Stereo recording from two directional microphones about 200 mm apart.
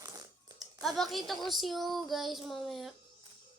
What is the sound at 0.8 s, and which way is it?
Speech, centre (ahead or behind).